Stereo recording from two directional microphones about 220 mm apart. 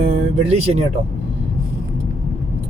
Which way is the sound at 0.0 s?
30° right (ahead or behind).